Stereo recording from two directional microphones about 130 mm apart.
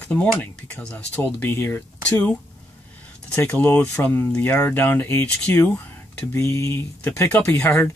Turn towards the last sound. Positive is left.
turn(degrees=15)  # may be behind; listen again after turning